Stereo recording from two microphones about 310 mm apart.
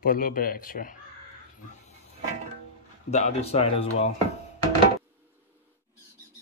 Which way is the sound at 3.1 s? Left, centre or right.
Left.